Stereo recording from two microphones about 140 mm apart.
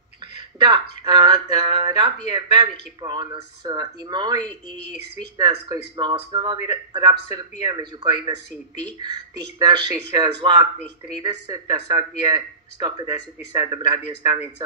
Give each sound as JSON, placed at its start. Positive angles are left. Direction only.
{"t": 0.7, "sound": "speech", "side_deg": -30}
{"t": 5.4, "sound": "speech", "side_deg": -30}